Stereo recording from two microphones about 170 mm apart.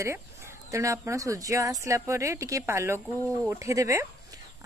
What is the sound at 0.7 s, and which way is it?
Speech, 15° right (ahead or behind).